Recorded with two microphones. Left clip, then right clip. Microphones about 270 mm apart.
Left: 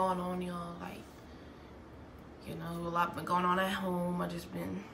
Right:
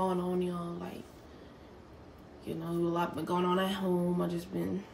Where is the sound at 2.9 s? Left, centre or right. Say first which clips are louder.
Left 3 dB; left.